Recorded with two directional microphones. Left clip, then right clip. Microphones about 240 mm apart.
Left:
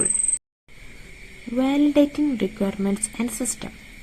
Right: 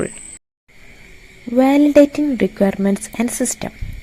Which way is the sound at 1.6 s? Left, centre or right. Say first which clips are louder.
Right 8 dB; right.